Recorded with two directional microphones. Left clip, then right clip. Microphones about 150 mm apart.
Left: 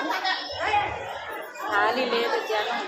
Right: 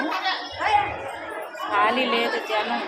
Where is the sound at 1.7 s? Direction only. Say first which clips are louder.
Right 2 dB; 20° right (ahead or behind).